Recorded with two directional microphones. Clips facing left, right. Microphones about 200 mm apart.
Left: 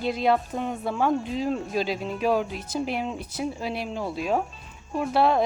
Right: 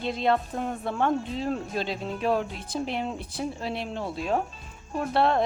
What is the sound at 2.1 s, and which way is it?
Speech, 5° left (ahead or behind).